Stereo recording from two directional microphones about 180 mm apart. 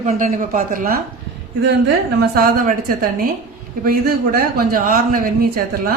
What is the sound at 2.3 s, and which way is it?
A man's voice, 50° right (ahead or behind).